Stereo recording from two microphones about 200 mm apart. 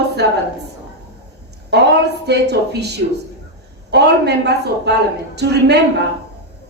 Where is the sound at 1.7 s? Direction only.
55° right (ahead or behind).